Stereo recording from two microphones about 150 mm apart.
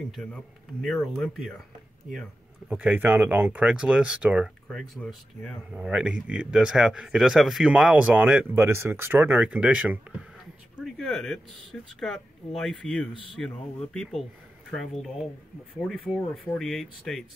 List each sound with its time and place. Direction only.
0.1 s a man's voice: 5° left (ahead or behind)
2.7 s speech: 10° right (ahead or behind)
5.7 s speech: 5° right (ahead or behind)
10.8 s speech: centre (ahead or behind)
16.5 s speech: centre (ahead or behind)